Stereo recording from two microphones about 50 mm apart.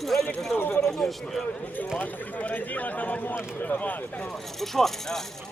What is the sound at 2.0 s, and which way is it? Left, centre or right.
Speech, left.